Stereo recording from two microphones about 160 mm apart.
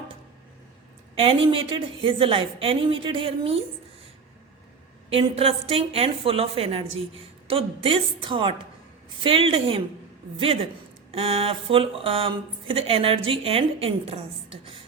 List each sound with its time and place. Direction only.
1.1 s a woman's voice: 35° right (ahead or behind)
5.0 s a woman's voice: 35° right (ahead or behind)